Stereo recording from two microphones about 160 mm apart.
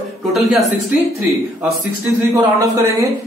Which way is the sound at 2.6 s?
20° right (ahead or behind).